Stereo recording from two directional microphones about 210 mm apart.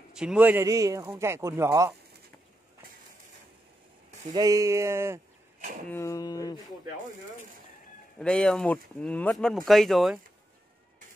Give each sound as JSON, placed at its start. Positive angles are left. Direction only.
{"t": 0.1, "sound": "speech", "side_deg": -5}
{"t": 4.3, "sound": "speech", "side_deg": -15}
{"t": 5.9, "sound": "speech", "side_deg": 10}
{"t": 8.2, "sound": "speech", "side_deg": 5}